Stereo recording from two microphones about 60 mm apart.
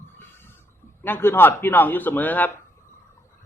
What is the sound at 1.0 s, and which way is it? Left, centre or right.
A man's voice, left.